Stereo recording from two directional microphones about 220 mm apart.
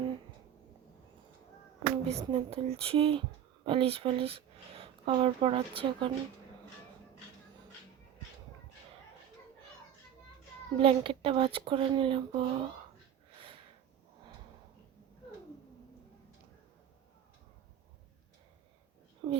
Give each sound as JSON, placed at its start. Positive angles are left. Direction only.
{"t": 2.0, "sound": "speech", "side_deg": -25}
{"t": 10.8, "sound": "speech", "side_deg": -25}
{"t": 19.2, "sound": "a sound", "side_deg": -20}